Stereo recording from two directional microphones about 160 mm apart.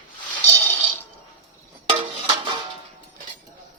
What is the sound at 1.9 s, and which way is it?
Music, 35° right (ahead or behind).